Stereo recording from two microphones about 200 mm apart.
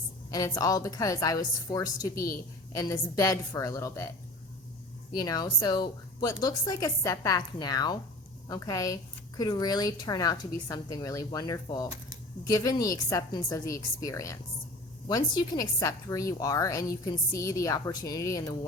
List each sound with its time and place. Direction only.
0.3 s a woman's voice: 20° left (ahead or behind)
5.1 s a woman's voice: 20° left (ahead or behind)